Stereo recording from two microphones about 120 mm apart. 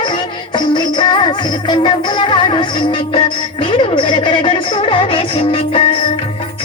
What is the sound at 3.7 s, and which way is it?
Music, 45° left (ahead or behind).